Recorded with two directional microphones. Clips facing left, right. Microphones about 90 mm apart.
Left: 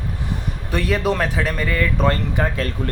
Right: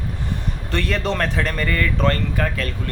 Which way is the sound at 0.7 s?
10° left (ahead or behind).